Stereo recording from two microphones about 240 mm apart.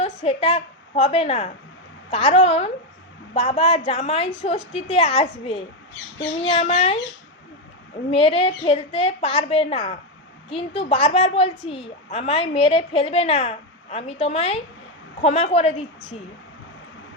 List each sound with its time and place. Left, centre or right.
0.0 s a woman's voice: left
8.1 s a woman's voice: left